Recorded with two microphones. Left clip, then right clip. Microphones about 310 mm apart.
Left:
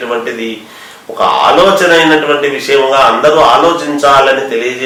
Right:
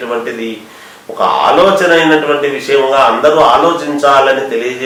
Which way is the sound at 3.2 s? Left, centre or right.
Right.